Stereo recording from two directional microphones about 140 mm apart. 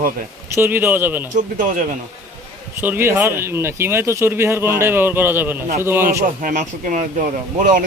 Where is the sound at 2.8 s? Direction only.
15° right (ahead or behind).